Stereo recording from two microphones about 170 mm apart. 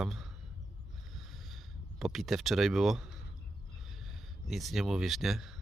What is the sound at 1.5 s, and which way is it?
Speech, centre (ahead or behind).